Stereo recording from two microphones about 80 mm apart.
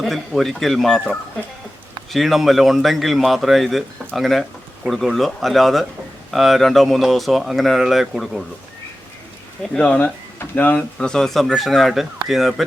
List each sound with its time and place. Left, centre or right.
0.0 s speech: centre
2.1 s speech: centre
9.7 s speech: centre
10.0 s speech: left
10.9 s speech: centre